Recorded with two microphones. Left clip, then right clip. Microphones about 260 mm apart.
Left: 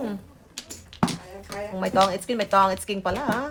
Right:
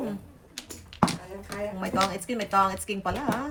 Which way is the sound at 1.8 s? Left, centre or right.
Left.